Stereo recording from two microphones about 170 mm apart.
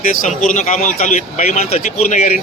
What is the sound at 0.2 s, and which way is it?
A man's voice, 45° left (ahead or behind).